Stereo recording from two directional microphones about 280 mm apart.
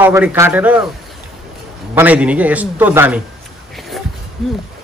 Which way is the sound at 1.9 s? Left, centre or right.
Centre.